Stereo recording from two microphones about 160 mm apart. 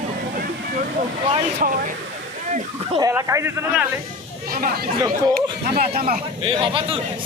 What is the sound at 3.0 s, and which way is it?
Speech, 20° right (ahead or behind).